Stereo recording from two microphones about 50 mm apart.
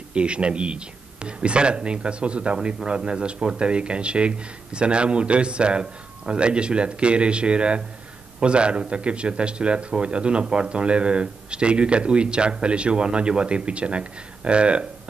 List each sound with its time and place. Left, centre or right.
0.1 s a man's voice: right